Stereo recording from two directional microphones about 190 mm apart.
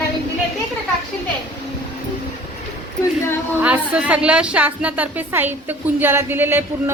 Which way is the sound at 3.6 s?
5° right (ahead or behind).